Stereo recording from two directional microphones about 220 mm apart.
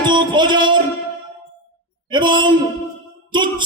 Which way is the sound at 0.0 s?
20° right (ahead or behind).